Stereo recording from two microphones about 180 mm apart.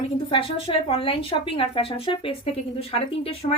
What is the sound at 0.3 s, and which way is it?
A woman's voice, 30° left (ahead or behind).